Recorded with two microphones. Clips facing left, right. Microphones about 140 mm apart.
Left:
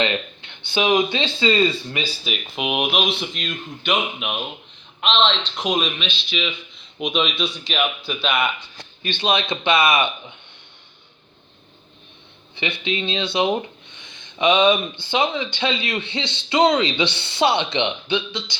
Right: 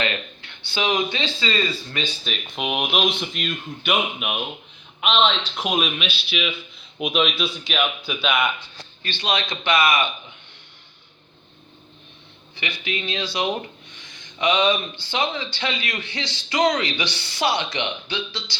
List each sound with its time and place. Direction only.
0.0 s speech: 20° left (ahead or behind)
1.9 s a man's voice: 5° left (ahead or behind)
9.0 s a man's voice: 20° left (ahead or behind)
12.5 s a man's voice: 25° left (ahead or behind)